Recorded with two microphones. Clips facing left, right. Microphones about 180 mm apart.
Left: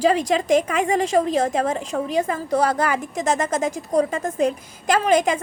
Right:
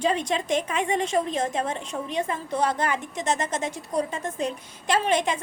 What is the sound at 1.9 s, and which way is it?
Speech, 55° left (ahead or behind).